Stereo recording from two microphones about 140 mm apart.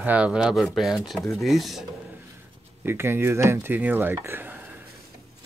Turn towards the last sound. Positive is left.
turn(degrees=-15)  # may be behind; listen again after turning